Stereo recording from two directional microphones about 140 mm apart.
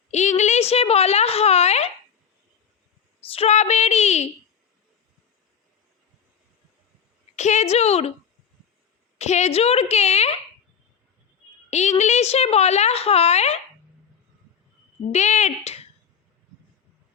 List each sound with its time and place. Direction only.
0.1 s a woman's voice: 55° left (ahead or behind)
3.3 s a woman's voice: 50° left (ahead or behind)
7.3 s a woman's voice: 55° left (ahead or behind)
9.1 s a woman's voice: 55° left (ahead or behind)
11.7 s a woman's voice: 55° left (ahead or behind)
15.1 s speech: 55° left (ahead or behind)